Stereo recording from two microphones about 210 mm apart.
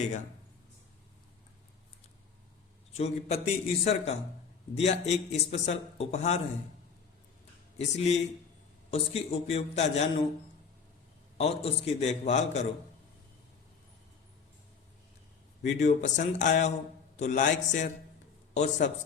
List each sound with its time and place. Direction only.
3.0 s speech: 30° left (ahead or behind)
7.8 s a man's voice: 30° left (ahead or behind)
11.3 s speech: 30° left (ahead or behind)
15.6 s speech: 35° left (ahead or behind)